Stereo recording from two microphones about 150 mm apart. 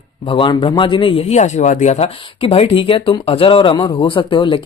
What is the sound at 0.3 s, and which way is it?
Speech, 35° left (ahead or behind).